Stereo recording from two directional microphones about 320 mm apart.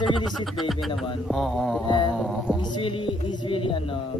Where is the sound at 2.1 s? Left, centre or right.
Centre.